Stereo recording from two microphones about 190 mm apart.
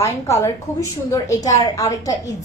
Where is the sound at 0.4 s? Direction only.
15° left (ahead or behind).